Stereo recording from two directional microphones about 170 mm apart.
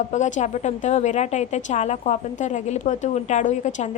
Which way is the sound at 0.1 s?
45° left (ahead or behind).